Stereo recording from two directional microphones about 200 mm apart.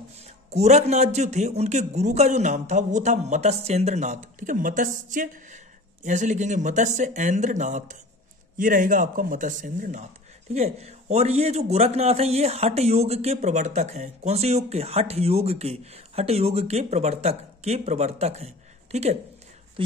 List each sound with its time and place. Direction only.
0.5 s speech: 35° right (ahead or behind)